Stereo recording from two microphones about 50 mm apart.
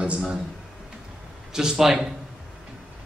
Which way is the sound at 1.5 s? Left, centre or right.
Centre.